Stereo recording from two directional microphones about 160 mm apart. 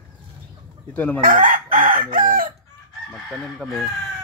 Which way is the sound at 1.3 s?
60° right (ahead or behind).